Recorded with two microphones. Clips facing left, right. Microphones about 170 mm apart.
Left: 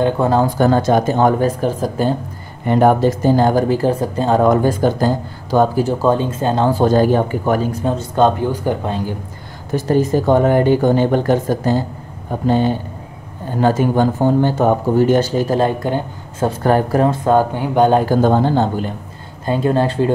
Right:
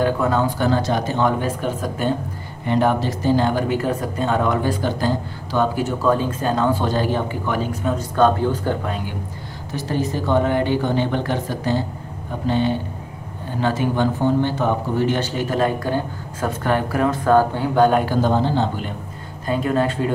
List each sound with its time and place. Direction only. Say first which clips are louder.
0.0 s speech: left 4 dB; 30° left (ahead or behind)
2.6 s speech: left 6 dB; 45° left (ahead or behind)
6.0 s speech: left 1 dB; 25° left (ahead or behind)
6.7 s speech: left 7 dB; 45° left (ahead or behind)
7.8 s speech: even; 25° left (ahead or behind)
8.4 s speech: left 2 dB; 15° left (ahead or behind)
8.8 s speech: left 5 dB; 30° left (ahead or behind)
9.7 s speech: left 8 dB; 50° left (ahead or behind); by 16.5 s 25° left (ahead or behind)
16.6 s speech: left 5 dB; 40° left (ahead or behind)
17.1 s speech: left 2 dB; 20° left (ahead or behind)
17.9 s speech: left 5 dB; 45° left (ahead or behind)
19.4 s speech: left 4 dB; 30° left (ahead or behind)